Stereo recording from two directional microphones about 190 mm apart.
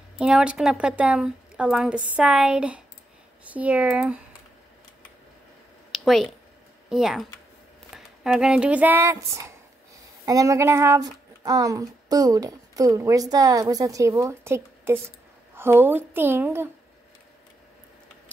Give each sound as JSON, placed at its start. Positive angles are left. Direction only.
{"t": 0.2, "sound": "a woman's voice", "side_deg": -5}
{"t": 5.9, "sound": "a sound", "side_deg": 0}
{"t": 6.9, "sound": "a woman's voice", "side_deg": 0}